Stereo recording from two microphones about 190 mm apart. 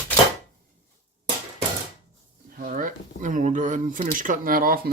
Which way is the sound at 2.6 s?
45° right (ahead or behind).